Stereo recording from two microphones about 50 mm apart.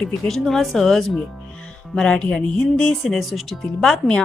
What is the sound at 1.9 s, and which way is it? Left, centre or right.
Speech, centre.